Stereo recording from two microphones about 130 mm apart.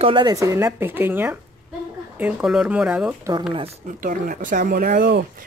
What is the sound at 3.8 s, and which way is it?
Speech, 90° right.